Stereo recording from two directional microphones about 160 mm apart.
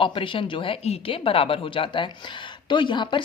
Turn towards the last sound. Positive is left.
turn(degrees=30)  # may be behind; listen again after turning